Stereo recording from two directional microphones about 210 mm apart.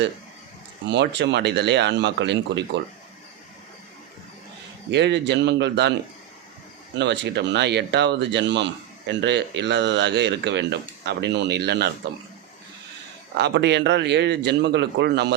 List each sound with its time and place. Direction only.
0.9 s speech: 55° right (ahead or behind)
4.9 s speech: 55° right (ahead or behind)
7.0 s speech: 55° right (ahead or behind)
13.3 s speech: 55° right (ahead or behind)